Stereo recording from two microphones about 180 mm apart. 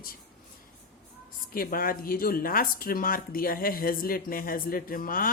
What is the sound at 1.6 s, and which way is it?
Speech, 55° left (ahead or behind).